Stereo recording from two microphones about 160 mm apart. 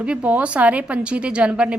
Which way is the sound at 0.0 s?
10° right (ahead or behind).